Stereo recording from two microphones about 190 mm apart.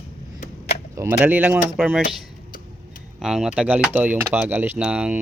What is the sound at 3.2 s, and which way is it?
Speech, centre (ahead or behind).